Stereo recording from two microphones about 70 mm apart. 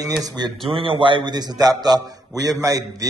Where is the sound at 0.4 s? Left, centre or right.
Right.